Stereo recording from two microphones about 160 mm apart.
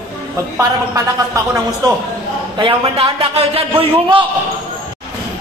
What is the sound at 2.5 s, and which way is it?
A man's voice, 35° right (ahead or behind).